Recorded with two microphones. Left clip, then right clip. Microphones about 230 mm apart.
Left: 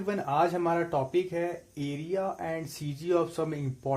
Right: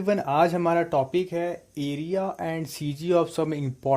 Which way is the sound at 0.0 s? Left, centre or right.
Right.